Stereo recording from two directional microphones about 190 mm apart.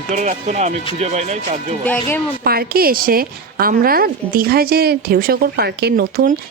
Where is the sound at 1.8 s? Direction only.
10° left (ahead or behind).